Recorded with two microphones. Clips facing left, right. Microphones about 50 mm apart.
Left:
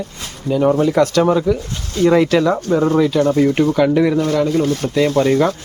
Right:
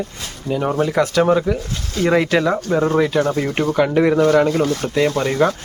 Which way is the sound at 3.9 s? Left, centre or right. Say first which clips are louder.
Right 1 dB; right.